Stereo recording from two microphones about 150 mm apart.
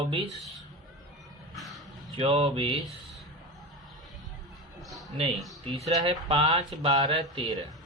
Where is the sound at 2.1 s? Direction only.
40° right (ahead or behind).